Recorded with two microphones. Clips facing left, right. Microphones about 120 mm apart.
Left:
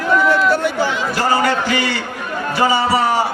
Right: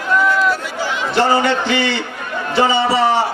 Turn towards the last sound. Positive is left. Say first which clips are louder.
# right 1 dB
turn(degrees=-25)  # may be behind; listen again after turning